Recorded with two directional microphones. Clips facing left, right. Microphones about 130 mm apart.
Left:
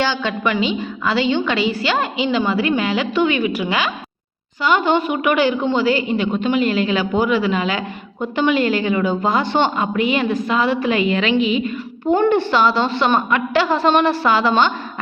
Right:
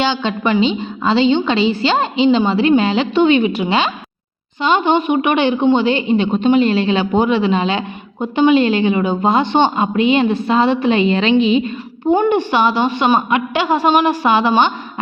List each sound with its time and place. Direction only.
0.0 s a woman's voice: 20° right (ahead or behind)
12.1 s a woman's voice: 15° right (ahead or behind)